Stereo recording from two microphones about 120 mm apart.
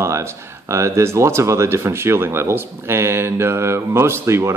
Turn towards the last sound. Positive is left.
turn(degrees=-20)  # may be behind; listen again after turning